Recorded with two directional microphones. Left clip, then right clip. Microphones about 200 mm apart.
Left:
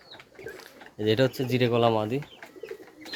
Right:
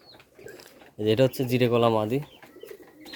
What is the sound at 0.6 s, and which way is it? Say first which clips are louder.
Speech: right 1 dB; 15° right (ahead or behind).